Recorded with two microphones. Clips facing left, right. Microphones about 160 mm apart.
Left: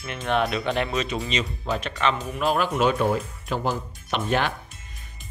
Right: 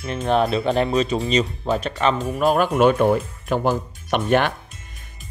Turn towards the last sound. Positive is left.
turn(degrees=-55)  # may be behind; listen again after turning